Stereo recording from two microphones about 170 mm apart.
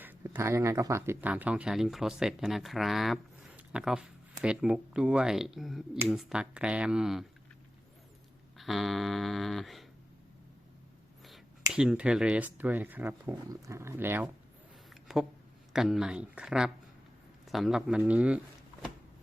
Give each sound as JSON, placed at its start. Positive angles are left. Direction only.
{"t": 0.0, "sound": "speech", "side_deg": -10}
{"t": 8.5, "sound": "speech", "side_deg": 0}
{"t": 11.7, "sound": "speech", "side_deg": -5}
{"t": 14.8, "sound": "a sound", "side_deg": 0}
{"t": 15.7, "sound": "speech", "side_deg": -5}